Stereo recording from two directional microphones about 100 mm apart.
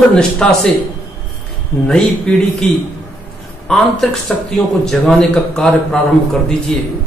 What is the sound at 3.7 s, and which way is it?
Speech, 5° left (ahead or behind).